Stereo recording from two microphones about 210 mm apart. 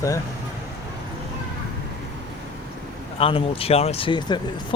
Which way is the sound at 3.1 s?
25° left (ahead or behind).